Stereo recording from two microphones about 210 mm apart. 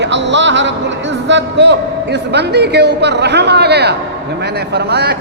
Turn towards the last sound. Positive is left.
turn(degrees=-50)  # may be behind; listen again after turning